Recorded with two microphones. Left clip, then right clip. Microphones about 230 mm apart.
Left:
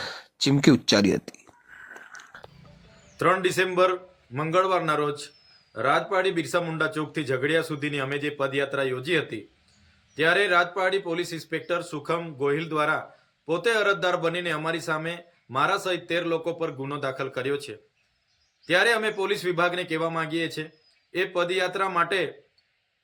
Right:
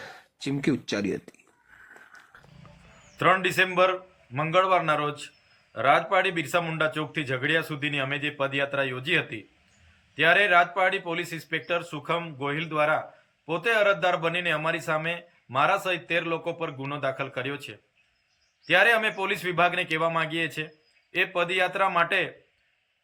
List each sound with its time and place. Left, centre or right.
0.0 s speech: left
1.9 s wheeze: centre
3.2 s a man's voice: centre
18.7 s a man's voice: centre